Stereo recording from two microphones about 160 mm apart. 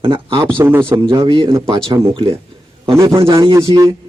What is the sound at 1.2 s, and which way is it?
Speech, 30° right (ahead or behind).